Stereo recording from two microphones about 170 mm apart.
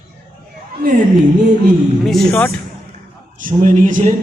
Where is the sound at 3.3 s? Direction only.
50° right (ahead or behind).